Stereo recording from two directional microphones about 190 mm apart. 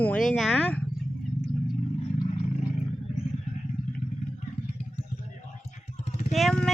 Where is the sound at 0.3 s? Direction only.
5° left (ahead or behind).